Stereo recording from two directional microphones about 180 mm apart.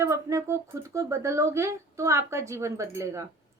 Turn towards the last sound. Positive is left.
turn(degrees=-15)  # may be behind; listen again after turning